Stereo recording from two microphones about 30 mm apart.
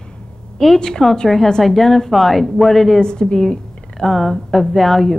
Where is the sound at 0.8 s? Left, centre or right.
Left; by 3.0 s centre.